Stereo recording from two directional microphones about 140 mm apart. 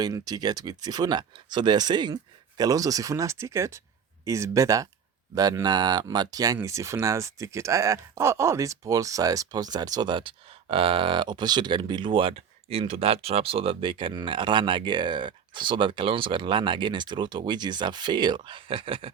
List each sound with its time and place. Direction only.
0.0 s speech: 30° right (ahead or behind)